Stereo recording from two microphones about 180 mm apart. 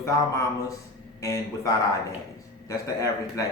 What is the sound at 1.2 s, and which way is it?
A man's voice, 20° left (ahead or behind).